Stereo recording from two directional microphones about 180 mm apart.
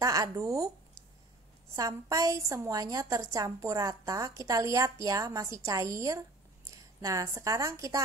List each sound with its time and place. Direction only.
0.0 s a woman's voice: 20° right (ahead or behind)
1.8 s a woman's voice: 20° right (ahead or behind)